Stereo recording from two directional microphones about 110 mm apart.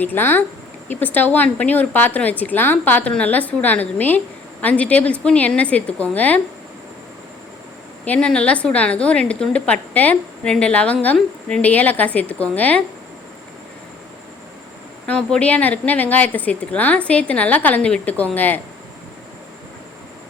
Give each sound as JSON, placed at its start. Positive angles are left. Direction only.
{"t": 0.0, "sound": "a woman's voice", "side_deg": 20}
{"t": 8.0, "sound": "a woman's voice", "side_deg": 10}
{"t": 15.0, "sound": "a woman's voice", "side_deg": 10}